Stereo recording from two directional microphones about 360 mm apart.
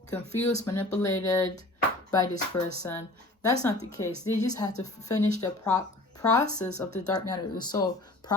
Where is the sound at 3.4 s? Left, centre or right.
Centre.